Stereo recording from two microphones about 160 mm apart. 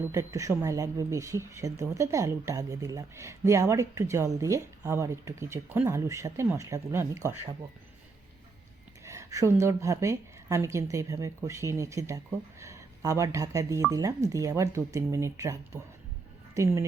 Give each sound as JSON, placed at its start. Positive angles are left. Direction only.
{"t": 0.1, "sound": "speech", "side_deg": -20}
{"t": 9.0, "sound": "speech", "side_deg": -20}